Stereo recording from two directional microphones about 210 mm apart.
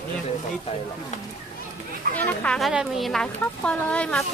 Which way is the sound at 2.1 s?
5° left (ahead or behind).